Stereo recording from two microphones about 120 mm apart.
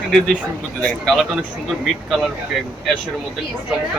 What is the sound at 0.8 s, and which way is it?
Speech, centre (ahead or behind).